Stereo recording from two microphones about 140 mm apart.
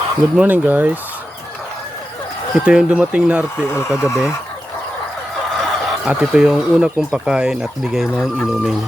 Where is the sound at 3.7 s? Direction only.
20° left (ahead or behind).